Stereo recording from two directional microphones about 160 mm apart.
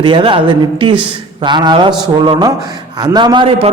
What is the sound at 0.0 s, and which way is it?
A man's voice, 30° right (ahead or behind).